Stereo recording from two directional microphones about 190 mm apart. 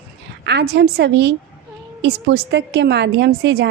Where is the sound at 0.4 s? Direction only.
60° right (ahead or behind).